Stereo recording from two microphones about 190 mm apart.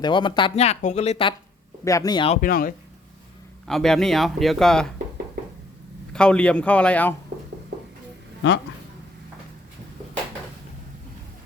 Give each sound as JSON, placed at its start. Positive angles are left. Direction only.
{"t": 0.0, "sound": "speech", "side_deg": 25}
{"t": 1.8, "sound": "speech", "side_deg": 15}
{"t": 2.3, "sound": "speech", "side_deg": 45}
{"t": 3.7, "sound": "speech", "side_deg": 0}
{"t": 6.1, "sound": "speech", "side_deg": 5}